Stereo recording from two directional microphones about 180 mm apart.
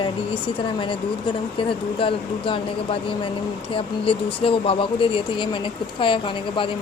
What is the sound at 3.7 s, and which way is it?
Speech, 30° left (ahead or behind).